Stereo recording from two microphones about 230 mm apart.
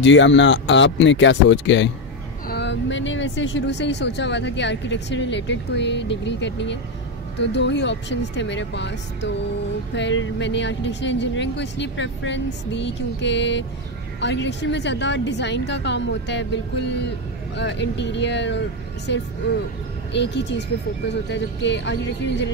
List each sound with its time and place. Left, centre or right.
0.0 s speech: left
20.1 s speech: left